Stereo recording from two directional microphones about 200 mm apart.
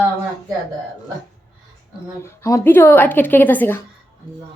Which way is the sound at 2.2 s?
15° left (ahead or behind).